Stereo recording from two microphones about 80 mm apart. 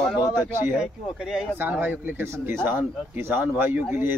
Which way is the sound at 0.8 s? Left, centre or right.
Centre.